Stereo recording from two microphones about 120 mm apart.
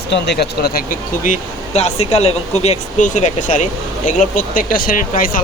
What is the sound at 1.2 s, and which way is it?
Speech, 75° left (ahead or behind).